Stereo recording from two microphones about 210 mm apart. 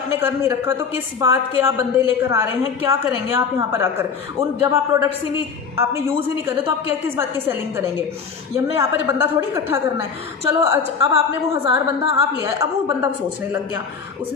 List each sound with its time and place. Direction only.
0.2 s a woman's voice: 10° right (ahead or behind)
11.6 s a woman's voice: 25° right (ahead or behind)
12.3 s a woman's voice: 10° right (ahead or behind)